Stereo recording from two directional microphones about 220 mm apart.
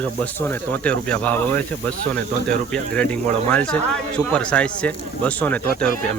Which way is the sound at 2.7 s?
5° left (ahead or behind).